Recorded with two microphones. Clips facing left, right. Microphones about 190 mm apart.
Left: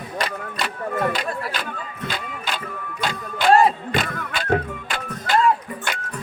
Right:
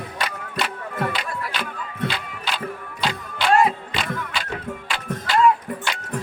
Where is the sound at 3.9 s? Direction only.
50° left (ahead or behind).